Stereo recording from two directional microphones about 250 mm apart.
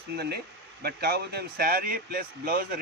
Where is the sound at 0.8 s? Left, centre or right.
Right.